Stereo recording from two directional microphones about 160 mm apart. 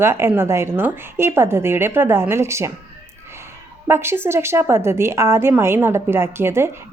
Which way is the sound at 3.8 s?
15° right (ahead or behind).